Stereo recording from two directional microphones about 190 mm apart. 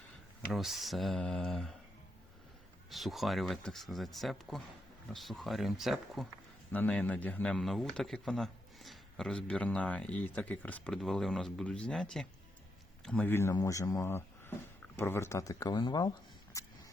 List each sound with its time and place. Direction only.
0.5 s speech: centre (ahead or behind)
2.9 s speech: centre (ahead or behind); by 16.6 s 20° left (ahead or behind)